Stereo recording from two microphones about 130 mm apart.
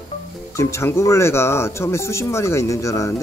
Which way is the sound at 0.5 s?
20° left (ahead or behind).